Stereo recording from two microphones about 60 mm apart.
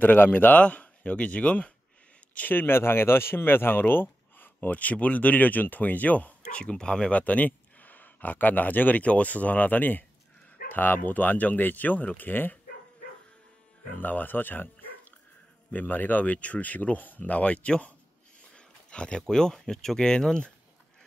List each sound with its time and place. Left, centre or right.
0.0 s speech: left
2.3 s speech: left
14.0 s speech: left; by 20.5 s centre